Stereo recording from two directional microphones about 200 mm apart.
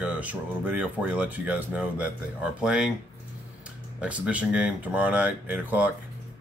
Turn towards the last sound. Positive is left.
turn(degrees=-5)  # may be behind; listen again after turning